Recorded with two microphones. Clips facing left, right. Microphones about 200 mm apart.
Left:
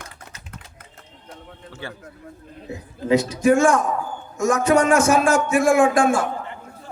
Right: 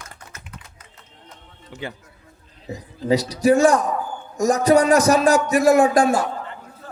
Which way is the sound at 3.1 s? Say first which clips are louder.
Even; 35° right (ahead or behind).